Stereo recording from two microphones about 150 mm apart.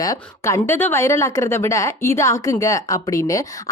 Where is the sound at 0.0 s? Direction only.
20° left (ahead or behind).